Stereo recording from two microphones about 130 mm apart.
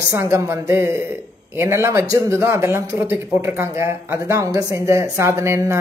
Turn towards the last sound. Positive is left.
turn(degrees=-20)  # may be behind; listen again after turning